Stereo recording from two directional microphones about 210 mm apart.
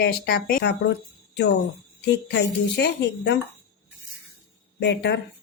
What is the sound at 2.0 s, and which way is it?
A woman's voice, 55° left (ahead or behind).